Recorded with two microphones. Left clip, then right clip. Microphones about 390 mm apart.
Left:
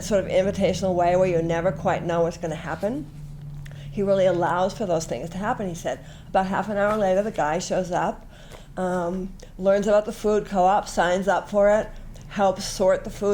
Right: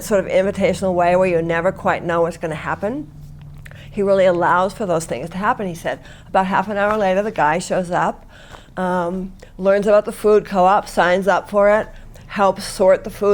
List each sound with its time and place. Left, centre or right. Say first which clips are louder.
0.0 s speech: right 5 dB; right
3.9 s speech: right 6 dB; right
8.7 s a sound: right 5 dB; right
9.6 s speech: right 5 dB; right